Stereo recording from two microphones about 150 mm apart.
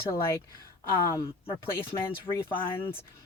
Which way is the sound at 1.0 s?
20° left (ahead or behind).